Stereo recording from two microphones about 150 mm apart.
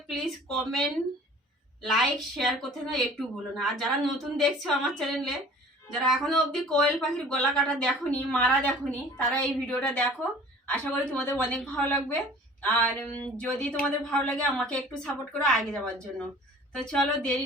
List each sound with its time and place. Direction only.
0.1 s speech: centre (ahead or behind)
1.8 s a woman's voice: centre (ahead or behind)